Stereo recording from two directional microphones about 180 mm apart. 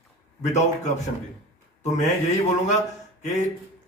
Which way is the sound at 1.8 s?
40° left (ahead or behind).